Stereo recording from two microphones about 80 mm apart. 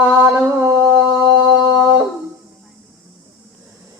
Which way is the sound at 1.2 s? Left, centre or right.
Right.